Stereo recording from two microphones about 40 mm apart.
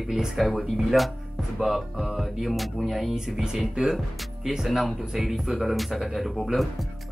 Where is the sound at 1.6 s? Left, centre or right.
Centre.